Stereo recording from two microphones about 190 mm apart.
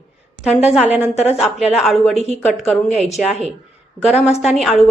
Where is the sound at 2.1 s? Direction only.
35° right (ahead or behind).